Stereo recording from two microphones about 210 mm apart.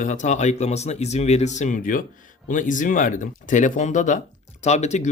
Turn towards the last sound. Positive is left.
turn(degrees=35)  # may be behind; listen again after turning